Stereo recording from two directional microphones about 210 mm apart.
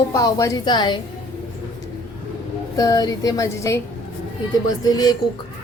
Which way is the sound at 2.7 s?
15° left (ahead or behind).